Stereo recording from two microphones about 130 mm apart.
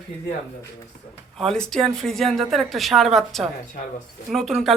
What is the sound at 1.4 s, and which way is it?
Speech, centre (ahead or behind).